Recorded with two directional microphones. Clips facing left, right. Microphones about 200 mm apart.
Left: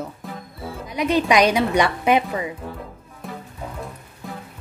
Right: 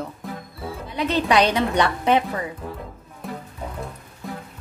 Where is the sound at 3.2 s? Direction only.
Centre (ahead or behind).